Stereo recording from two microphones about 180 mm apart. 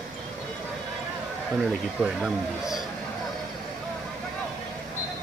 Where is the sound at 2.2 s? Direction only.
5° right (ahead or behind).